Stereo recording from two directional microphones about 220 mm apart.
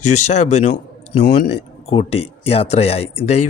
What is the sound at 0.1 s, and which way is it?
Speech, 30° left (ahead or behind).